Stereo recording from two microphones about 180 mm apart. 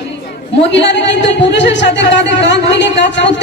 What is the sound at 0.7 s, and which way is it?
A woman's voice, 75° left (ahead or behind).